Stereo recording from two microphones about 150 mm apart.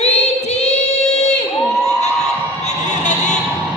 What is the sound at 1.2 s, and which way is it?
Crowd, 50° left (ahead or behind).